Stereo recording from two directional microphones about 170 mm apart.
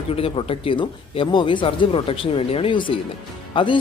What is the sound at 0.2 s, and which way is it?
Speech, 35° left (ahead or behind).